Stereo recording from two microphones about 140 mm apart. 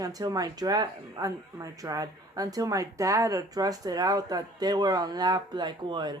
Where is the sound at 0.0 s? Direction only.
25° right (ahead or behind).